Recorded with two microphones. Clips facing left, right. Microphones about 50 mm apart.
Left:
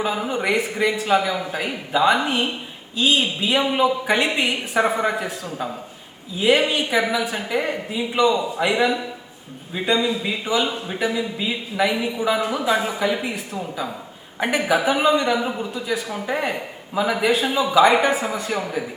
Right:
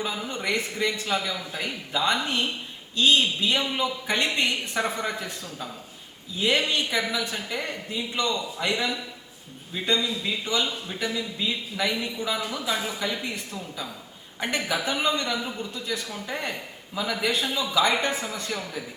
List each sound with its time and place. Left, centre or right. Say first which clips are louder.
0.0 s a man's voice: left 7 dB; centre